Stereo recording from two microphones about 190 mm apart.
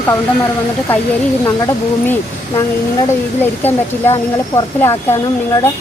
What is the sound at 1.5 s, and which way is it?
Speech, 15° left (ahead or behind).